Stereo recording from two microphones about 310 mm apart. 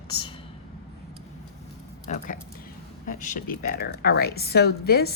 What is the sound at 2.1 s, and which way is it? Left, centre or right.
Speech, left.